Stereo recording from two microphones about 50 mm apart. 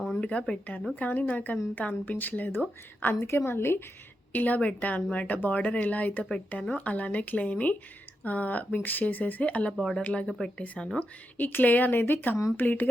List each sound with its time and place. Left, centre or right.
0.2 s speech: centre
2.0 s speech: left
3.2 s a woman's voice: left
4.3 s speech: left
9.7 s speech: centre
10.0 s speech: left
10.2 s speech: centre
11.3 s speech: left